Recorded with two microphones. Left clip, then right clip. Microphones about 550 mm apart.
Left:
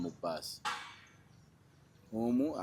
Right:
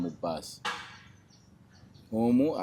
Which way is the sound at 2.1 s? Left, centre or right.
Right.